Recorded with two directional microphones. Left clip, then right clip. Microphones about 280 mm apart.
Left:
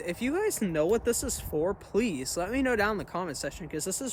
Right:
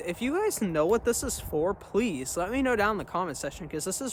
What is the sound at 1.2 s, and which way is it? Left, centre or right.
Speech, centre.